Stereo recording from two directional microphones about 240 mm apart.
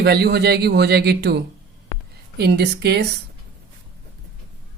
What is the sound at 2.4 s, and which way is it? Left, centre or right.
Speech, right.